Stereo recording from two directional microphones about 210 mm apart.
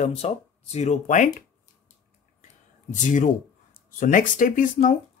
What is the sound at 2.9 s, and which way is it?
Speech, 35° left (ahead or behind).